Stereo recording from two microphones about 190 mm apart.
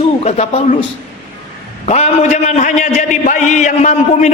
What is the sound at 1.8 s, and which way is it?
A man's voice, 35° left (ahead or behind).